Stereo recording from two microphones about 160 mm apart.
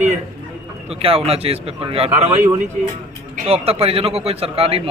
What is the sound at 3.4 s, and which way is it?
Speech, 40° right (ahead or behind).